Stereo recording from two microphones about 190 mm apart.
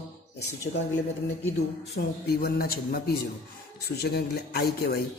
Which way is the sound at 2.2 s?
55° left (ahead or behind).